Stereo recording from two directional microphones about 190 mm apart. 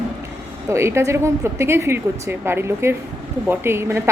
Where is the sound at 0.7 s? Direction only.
15° right (ahead or behind).